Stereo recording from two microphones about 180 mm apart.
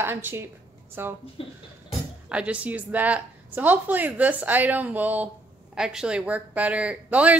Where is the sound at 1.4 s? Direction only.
30° left (ahead or behind).